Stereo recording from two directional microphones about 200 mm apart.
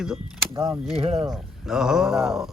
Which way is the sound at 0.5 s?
15° right (ahead or behind).